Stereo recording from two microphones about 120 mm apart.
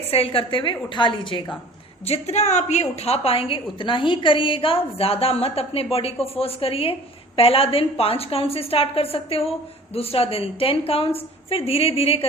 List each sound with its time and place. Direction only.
0.1 s a woman's voice: 50° left (ahead or behind)
2.0 s a woman's voice: 60° left (ahead or behind)